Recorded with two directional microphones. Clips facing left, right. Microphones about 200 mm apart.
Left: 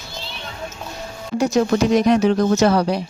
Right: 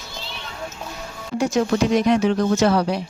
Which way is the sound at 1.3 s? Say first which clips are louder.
Left 2 dB; 40° left (ahead or behind).